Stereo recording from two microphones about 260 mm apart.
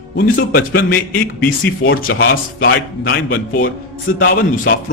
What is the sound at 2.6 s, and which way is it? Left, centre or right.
A man's voice, left.